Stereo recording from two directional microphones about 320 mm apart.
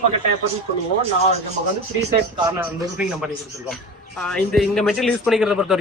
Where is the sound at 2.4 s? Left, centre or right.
Centre.